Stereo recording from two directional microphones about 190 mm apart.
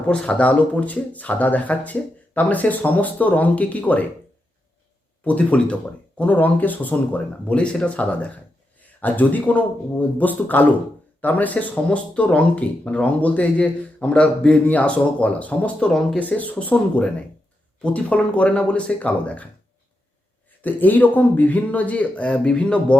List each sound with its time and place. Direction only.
0.1 s speech: 5° left (ahead or behind)
5.2 s speech: 5° left (ahead or behind)
20.6 s speech: 10° left (ahead or behind)